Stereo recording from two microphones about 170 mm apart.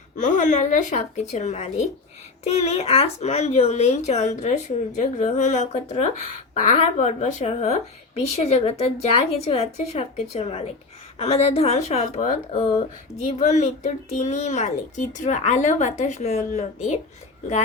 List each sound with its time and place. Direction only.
0.2 s a child's voice: 50° left (ahead or behind)